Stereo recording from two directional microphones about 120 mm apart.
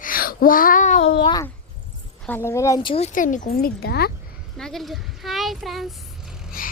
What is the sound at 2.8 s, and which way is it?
Speech, 55° left (ahead or behind).